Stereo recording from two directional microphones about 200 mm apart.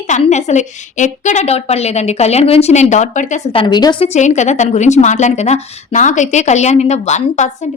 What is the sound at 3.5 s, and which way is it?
Speech, 20° left (ahead or behind).